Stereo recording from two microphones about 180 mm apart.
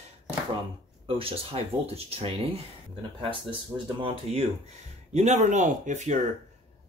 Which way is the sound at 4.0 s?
30° right (ahead or behind).